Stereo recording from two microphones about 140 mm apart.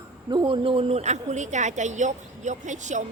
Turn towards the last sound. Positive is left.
turn(degrees=-60)  # may be behind; listen again after turning